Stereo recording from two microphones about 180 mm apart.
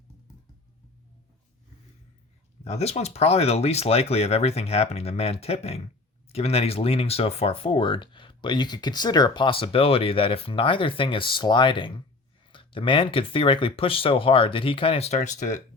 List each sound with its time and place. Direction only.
2.6 s speech: 35° left (ahead or behind)